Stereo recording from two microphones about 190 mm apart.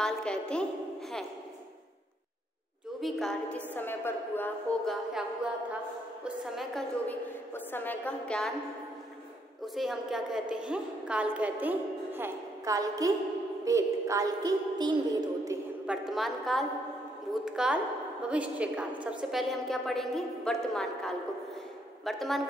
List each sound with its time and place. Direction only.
0.0 s a woman's voice: 5° left (ahead or behind)
3.0 s a woman's voice: centre (ahead or behind)
9.8 s a woman's voice: centre (ahead or behind); by 15.5 s 20° right (ahead or behind)
16.1 s a woman's voice: centre (ahead or behind)